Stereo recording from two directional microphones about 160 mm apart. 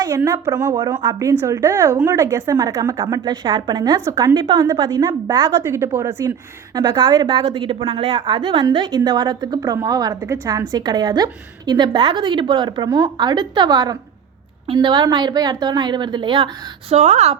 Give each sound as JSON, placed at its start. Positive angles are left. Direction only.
{"t": 0.1, "sound": "a woman's voice", "side_deg": -15}
{"t": 6.7, "sound": "a woman's voice", "side_deg": -25}
{"t": 16.9, "sound": "speech", "side_deg": -45}